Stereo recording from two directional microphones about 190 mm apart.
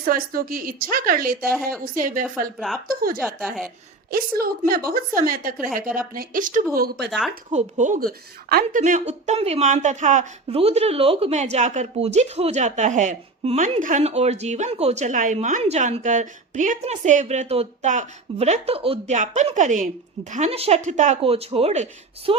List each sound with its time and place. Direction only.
0.0 s a woman's voice: 50° right (ahead or behind)
2.6 s a woman's voice: centre (ahead or behind)
2.8 s a woman's voice: 50° right (ahead or behind)
3.4 s a woman's voice: centre (ahead or behind)
4.1 s a woman's voice: 50° right (ahead or behind); by 22.4 s 30° right (ahead or behind)